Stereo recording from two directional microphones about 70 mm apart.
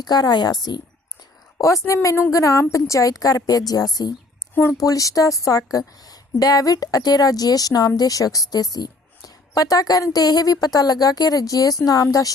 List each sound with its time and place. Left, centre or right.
0.0 s a woman's voice: left
1.5 s a woman's voice: left